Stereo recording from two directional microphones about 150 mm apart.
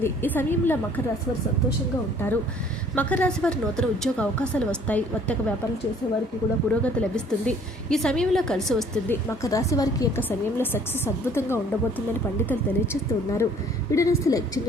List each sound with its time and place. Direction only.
0.0 s speech: 15° left (ahead or behind)
2.9 s speech: 10° left (ahead or behind)
6.8 s a woman's voice: 5° left (ahead or behind)
9.0 s a woman's voice: 20° left (ahead or behind)
10.2 s speech: 15° left (ahead or behind)
12.9 s a woman's voice: 20° left (ahead or behind)